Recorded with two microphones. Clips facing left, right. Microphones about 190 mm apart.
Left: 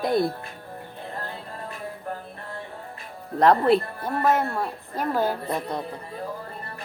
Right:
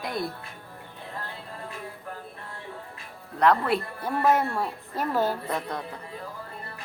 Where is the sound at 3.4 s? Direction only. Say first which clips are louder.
Left 4 dB; 35° left (ahead or behind).